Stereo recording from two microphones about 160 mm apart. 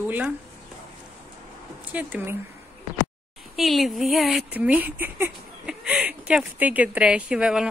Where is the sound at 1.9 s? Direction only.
10° right (ahead or behind).